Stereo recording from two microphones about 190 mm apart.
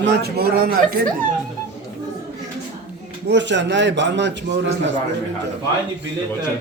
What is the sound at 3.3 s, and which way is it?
A man's voice, 70° right (ahead or behind).